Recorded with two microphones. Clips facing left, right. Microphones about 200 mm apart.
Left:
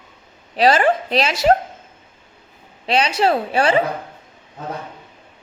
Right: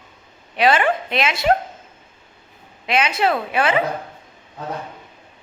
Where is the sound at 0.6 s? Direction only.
35° left (ahead or behind).